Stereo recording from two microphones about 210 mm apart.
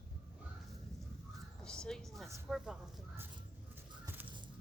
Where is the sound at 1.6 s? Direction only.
5° left (ahead or behind).